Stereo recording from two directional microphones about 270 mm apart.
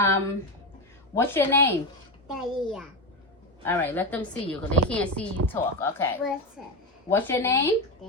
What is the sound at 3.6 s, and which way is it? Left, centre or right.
A woman's voice, centre.